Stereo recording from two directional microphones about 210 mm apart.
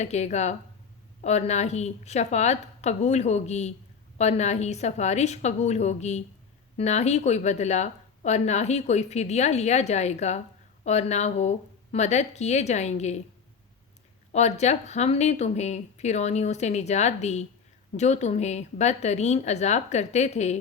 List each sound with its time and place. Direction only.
0.0 s speech: 30° left (ahead or behind)
14.3 s speech: 30° left (ahead or behind)